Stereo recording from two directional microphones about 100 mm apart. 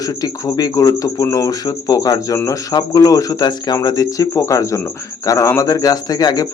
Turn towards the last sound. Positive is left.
turn(degrees=40)  # may be behind; listen again after turning